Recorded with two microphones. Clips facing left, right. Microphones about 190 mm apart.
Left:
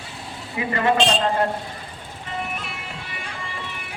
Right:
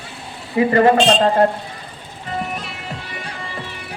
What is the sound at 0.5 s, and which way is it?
Speech, 40° right (ahead or behind).